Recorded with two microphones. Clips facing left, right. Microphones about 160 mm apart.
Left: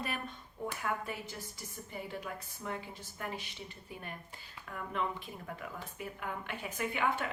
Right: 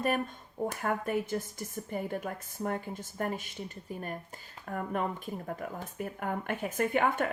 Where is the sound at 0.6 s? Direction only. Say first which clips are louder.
Right 6 dB; 45° right (ahead or behind).